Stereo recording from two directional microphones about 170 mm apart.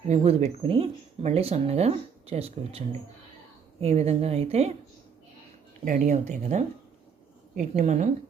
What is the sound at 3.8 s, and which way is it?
Speech, 35° right (ahead or behind).